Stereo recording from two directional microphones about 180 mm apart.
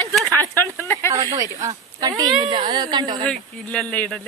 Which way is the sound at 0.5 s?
15° left (ahead or behind).